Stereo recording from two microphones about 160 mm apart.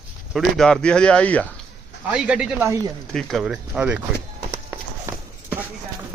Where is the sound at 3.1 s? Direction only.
Centre (ahead or behind).